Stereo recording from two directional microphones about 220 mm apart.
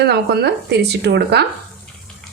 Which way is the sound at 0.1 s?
45° right (ahead or behind).